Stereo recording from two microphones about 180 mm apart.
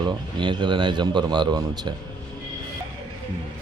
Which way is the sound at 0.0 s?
25° right (ahead or behind).